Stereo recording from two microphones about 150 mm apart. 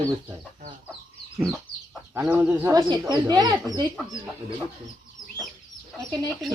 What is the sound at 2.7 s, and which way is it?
Speech, 30° right (ahead or behind).